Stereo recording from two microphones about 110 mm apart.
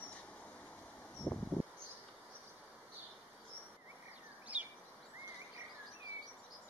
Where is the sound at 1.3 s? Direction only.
30° left (ahead or behind).